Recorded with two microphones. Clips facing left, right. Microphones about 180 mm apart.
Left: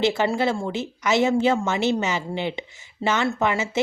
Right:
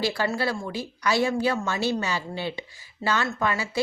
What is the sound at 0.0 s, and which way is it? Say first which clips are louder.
A woman's voice: left 5 dB; 20° left (ahead or behind).